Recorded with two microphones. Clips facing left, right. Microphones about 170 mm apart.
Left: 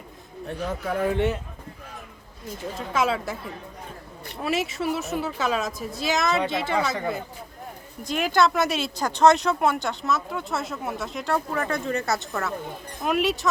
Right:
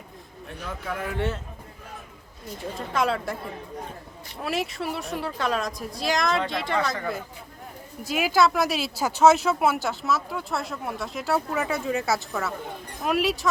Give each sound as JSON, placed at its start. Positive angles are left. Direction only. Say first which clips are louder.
{"t": 0.4, "sound": "speech", "louder": "left 5 dB", "side_deg": 40}
{"t": 1.1, "sound": "a man's voice", "louder": "left 1 dB", "side_deg": 15}
{"t": 2.6, "sound": "speech", "louder": "left 1 dB", "side_deg": 0}
{"t": 4.4, "sound": "speech", "louder": "left 3 dB", "side_deg": 0}
{"t": 8.0, "sound": "speech", "louder": "even", "side_deg": -5}